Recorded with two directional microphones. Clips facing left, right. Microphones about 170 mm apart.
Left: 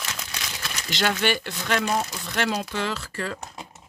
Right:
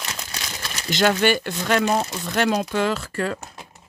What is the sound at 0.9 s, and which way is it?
Speech, 45° right (ahead or behind).